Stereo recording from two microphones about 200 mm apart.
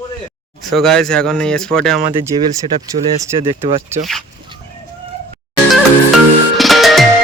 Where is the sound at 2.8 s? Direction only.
15° right (ahead or behind).